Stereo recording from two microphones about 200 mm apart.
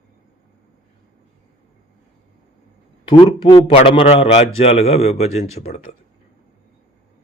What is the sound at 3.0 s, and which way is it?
A man's voice, 25° left (ahead or behind).